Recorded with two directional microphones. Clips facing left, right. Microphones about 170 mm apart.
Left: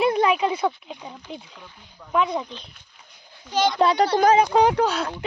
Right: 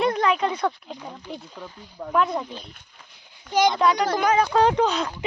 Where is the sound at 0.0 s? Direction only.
10° left (ahead or behind).